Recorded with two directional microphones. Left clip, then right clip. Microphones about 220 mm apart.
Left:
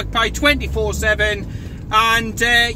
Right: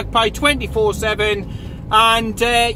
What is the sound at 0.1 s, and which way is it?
Speech, 15° left (ahead or behind).